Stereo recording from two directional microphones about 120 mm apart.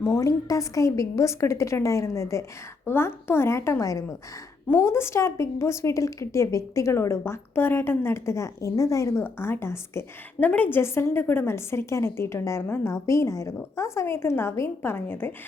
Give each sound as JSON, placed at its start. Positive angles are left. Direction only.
{"t": 0.0, "sound": "a woman's voice", "side_deg": 25}